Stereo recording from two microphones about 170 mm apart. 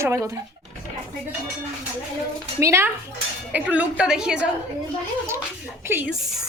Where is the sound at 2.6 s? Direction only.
15° right (ahead or behind).